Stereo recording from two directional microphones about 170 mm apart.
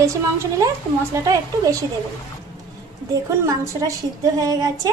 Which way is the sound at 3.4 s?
20° right (ahead or behind).